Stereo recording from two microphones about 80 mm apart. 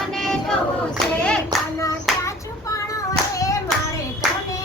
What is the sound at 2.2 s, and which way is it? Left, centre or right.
Clapping, left.